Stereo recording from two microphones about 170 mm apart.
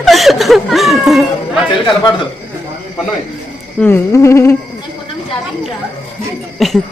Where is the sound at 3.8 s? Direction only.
15° left (ahead or behind).